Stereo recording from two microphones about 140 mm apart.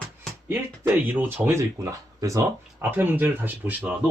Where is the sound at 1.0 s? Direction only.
15° right (ahead or behind).